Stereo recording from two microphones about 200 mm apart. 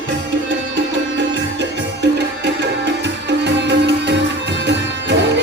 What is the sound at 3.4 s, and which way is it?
Music, 60° right (ahead or behind).